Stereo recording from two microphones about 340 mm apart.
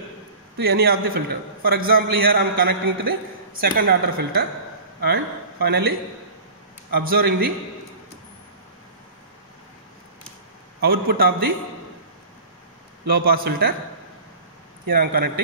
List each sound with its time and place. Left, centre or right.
0.6 s a man's voice: right
5.0 s a man's voice: right
10.8 s a man's voice: right
13.0 s a man's voice: right
14.9 s a man's voice: right